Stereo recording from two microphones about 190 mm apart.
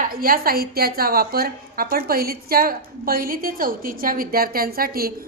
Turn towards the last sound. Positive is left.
turn(degrees=-50)  # may be behind; listen again after turning